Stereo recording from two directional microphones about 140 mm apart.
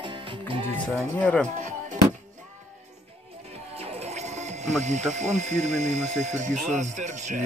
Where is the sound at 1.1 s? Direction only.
10° left (ahead or behind).